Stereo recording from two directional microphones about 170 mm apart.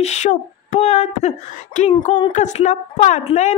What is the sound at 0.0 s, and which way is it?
A woman's voice, 45° left (ahead or behind).